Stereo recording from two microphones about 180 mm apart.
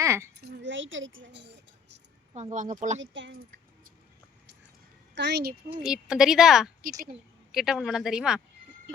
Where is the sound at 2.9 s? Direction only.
90° right.